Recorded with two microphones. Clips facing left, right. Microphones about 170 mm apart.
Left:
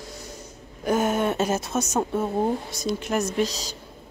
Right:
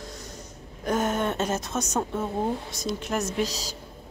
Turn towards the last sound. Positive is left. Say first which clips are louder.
# left 3 dB
turn(degrees=-5)  # may be behind; listen again after turning